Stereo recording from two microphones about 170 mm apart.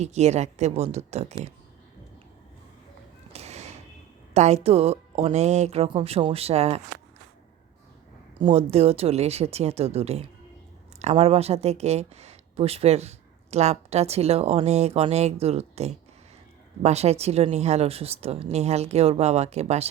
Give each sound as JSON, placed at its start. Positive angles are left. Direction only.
{"t": 0.0, "sound": "speech", "side_deg": -40}
{"t": 3.3, "sound": "a sound", "side_deg": -40}
{"t": 4.4, "sound": "speech", "side_deg": -40}
{"t": 8.4, "sound": "speech", "side_deg": -35}